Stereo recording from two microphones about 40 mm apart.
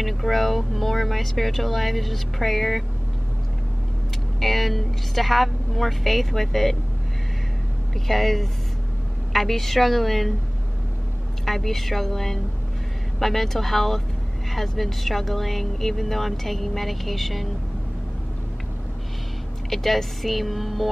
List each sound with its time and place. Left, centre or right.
0.0 s speech: centre
4.4 s speech: centre
7.9 s speech: centre
11.4 s speech: centre
19.7 s speech: centre